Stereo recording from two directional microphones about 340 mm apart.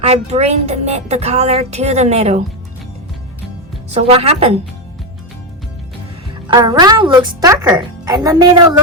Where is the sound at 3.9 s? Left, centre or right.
Centre.